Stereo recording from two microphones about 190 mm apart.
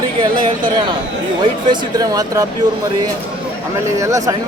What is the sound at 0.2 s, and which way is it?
A man's voice, 25° right (ahead or behind).